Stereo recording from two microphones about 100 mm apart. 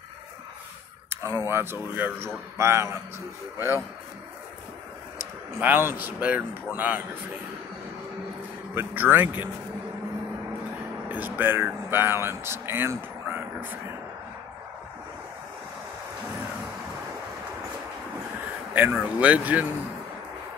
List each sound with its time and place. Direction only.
1.1 s a sound: 30° right (ahead or behind)
1.5 s speech: 25° right (ahead or behind)
5.2 s speech: 20° right (ahead or behind)
8.7 s speech: 20° right (ahead or behind)
11.1 s speech: 20° right (ahead or behind)
18.7 s a sound: 15° right (ahead or behind)
19.1 s speech: 15° right (ahead or behind)